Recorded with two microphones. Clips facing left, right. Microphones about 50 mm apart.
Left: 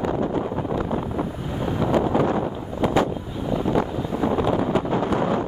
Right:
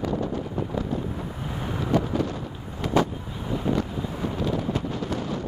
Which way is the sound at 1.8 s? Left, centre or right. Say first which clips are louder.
Left 5 dB; left.